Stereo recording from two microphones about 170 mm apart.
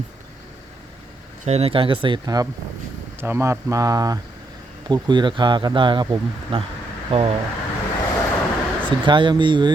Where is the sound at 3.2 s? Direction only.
15° right (ahead or behind); by 7.3 s 30° right (ahead or behind).